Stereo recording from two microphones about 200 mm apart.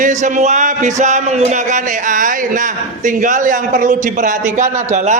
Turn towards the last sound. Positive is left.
turn(degrees=-35)  # may be behind; listen again after turning